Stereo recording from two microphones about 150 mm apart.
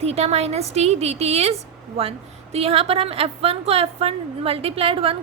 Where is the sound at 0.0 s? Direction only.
45° right (ahead or behind).